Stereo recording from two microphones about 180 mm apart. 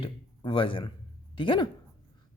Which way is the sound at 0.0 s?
30° left (ahead or behind).